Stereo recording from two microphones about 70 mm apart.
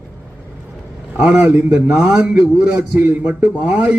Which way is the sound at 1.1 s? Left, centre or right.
Centre.